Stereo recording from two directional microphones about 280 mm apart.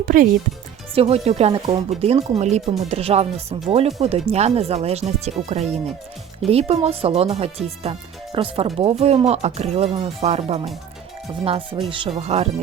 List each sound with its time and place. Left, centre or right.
0.0 s speech: right